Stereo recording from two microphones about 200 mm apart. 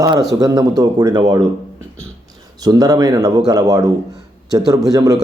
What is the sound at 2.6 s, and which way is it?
A man's voice, 20° right (ahead or behind).